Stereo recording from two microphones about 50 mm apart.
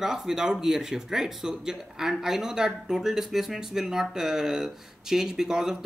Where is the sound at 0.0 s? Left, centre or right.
Centre.